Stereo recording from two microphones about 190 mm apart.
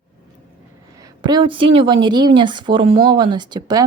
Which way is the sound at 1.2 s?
25° right (ahead or behind).